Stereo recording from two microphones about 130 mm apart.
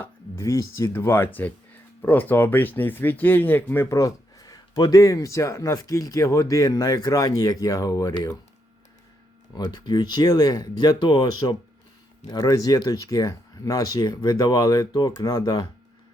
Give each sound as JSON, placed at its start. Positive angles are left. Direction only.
{"t": 0.0, "sound": "speech", "side_deg": 20}
{"t": 9.6, "sound": "speech", "side_deg": 35}